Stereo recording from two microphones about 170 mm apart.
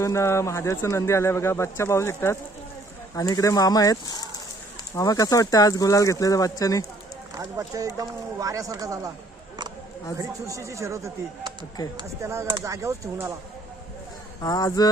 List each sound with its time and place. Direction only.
0.0 s speech: 15° left (ahead or behind)
7.3 s speech: 20° right (ahead or behind)
10.2 s speech: 20° right (ahead or behind)
14.4 s speech: 20° left (ahead or behind)